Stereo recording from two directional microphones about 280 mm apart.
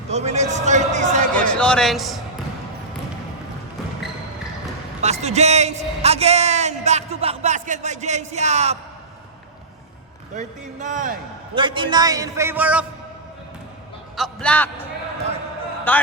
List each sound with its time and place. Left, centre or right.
0.1 s a sound: right
1.4 s a man's voice: centre
4.9 s a man's voice: right
10.3 s a man's voice: right
11.5 s a man's voice: centre
14.2 s a man's voice: centre
15.9 s a man's voice: centre